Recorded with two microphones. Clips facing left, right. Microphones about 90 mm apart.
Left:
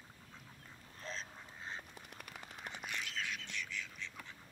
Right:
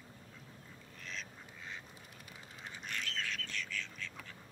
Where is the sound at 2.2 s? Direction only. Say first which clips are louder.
Left 2 dB; 60° left (ahead or behind).